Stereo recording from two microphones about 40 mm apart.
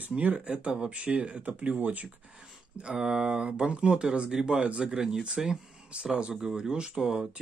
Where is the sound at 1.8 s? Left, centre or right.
Right.